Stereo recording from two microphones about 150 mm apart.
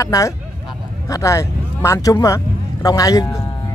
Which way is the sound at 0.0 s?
20° left (ahead or behind).